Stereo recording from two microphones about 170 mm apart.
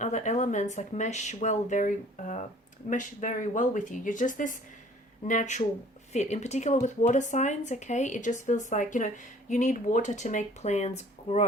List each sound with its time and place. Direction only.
0.0 s speech: 45° left (ahead or behind)